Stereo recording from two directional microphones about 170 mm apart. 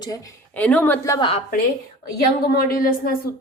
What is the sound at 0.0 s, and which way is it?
Speech, 20° left (ahead or behind).